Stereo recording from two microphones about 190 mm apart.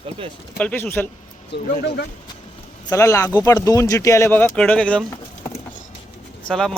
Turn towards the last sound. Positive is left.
turn(degrees=5)  # may be behind; listen again after turning